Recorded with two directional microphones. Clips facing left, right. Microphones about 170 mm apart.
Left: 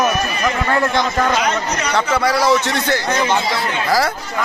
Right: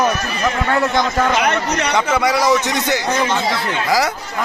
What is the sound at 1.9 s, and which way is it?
A man's voice, 20° right (ahead or behind).